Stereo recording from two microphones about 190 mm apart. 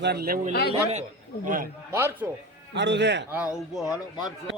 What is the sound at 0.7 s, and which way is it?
Speech, 35° right (ahead or behind).